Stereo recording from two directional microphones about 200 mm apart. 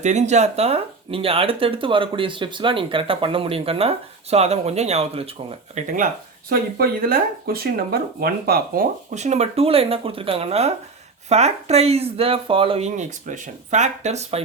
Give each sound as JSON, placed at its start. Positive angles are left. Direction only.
{"t": 0.0, "sound": "speech", "side_deg": -35}
{"t": 6.5, "sound": "speech", "side_deg": -50}